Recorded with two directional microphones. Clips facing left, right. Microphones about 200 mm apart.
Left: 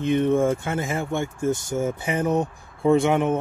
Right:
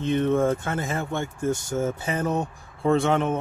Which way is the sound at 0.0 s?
15° left (ahead or behind).